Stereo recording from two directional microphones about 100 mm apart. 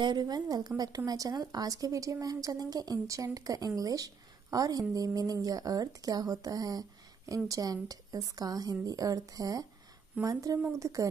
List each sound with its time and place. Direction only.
0.0 s a woman's voice: 45° right (ahead or behind)